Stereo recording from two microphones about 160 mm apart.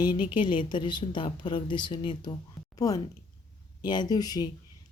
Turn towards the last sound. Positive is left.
turn(degrees=25)  # may be behind; listen again after turning